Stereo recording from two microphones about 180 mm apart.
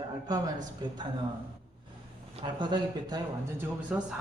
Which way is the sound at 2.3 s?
25° right (ahead or behind).